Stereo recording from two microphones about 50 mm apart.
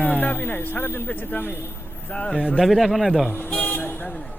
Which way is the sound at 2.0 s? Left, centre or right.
Left.